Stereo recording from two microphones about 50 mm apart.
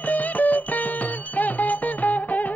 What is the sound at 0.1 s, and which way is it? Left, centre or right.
Music, left.